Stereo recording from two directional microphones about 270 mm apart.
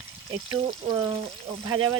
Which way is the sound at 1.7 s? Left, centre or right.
Right.